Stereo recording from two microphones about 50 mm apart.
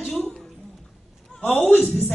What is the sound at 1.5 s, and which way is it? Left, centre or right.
Speech, left.